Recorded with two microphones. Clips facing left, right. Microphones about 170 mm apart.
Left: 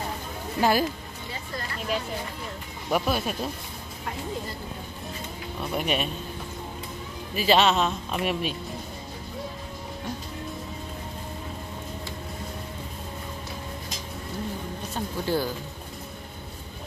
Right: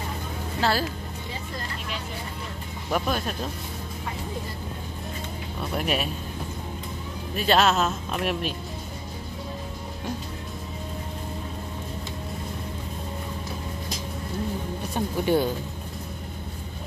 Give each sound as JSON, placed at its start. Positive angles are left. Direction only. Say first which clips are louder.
{"t": 0.6, "sound": "speech", "louder": "left 3 dB", "side_deg": 15}
{"t": 2.9, "sound": "speech", "louder": "left 1 dB", "side_deg": 5}
{"t": 5.6, "sound": "speech", "louder": "even", "side_deg": 0}
{"t": 7.3, "sound": "speech", "louder": "even", "side_deg": 0}
{"t": 15.0, "sound": "speech", "louder": "right 4 dB", "side_deg": -20}